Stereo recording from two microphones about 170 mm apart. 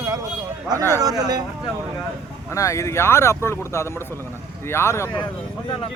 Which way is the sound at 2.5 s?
20° left (ahead or behind).